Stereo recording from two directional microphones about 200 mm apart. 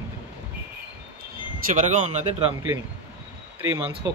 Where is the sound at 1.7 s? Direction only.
35° right (ahead or behind).